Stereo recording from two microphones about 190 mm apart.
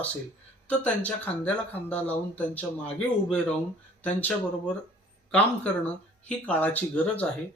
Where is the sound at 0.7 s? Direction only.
10° left (ahead or behind).